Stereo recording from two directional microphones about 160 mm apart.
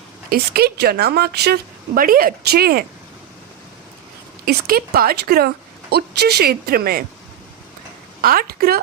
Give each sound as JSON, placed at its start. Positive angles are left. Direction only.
{"t": 0.3, "sound": "speech", "side_deg": -80}
{"t": 2.0, "sound": "speech", "side_deg": -65}
{"t": 4.4, "sound": "speech", "side_deg": -70}
{"t": 5.9, "sound": "speech", "side_deg": -90}
{"t": 8.2, "sound": "speech", "side_deg": -65}